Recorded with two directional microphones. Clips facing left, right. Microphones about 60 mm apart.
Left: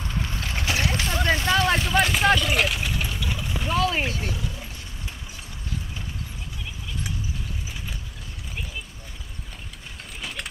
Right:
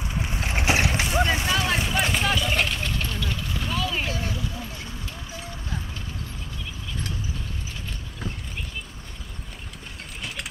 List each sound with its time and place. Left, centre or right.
0.0 s vehicle: centre; by 4.1 s left
4.1 s speech: right
10.2 s a sound: centre